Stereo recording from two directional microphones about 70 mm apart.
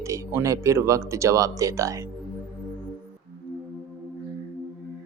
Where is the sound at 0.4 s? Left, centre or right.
Right.